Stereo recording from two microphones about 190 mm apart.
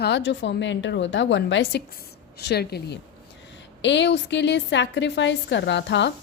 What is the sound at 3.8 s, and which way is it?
A woman's voice, 70° left (ahead or behind).